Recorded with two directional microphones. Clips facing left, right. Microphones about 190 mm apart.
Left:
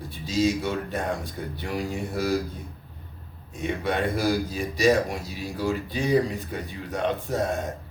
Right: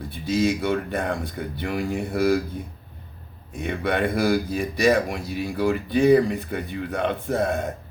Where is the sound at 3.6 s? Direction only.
60° right (ahead or behind).